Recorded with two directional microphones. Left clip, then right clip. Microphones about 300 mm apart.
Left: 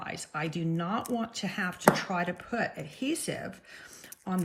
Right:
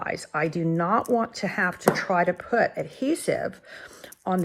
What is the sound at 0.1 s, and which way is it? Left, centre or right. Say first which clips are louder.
Speech: right 9 dB; centre.